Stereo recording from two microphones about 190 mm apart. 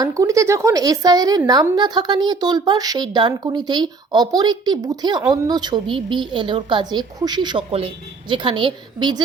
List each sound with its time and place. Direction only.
0.0 s speech: 15° right (ahead or behind)